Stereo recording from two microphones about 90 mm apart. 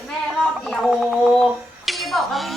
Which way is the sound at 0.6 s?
Centre (ahead or behind).